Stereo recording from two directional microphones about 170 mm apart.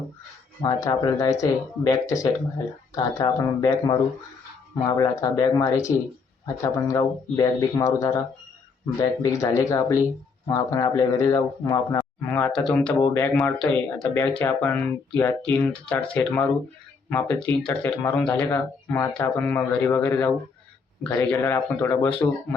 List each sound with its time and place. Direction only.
0.6 s speech: 20° left (ahead or behind)